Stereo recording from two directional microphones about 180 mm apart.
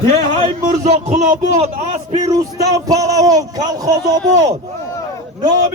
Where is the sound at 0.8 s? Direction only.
40° right (ahead or behind).